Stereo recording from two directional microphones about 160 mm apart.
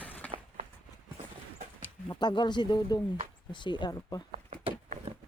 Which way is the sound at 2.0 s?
30° left (ahead or behind).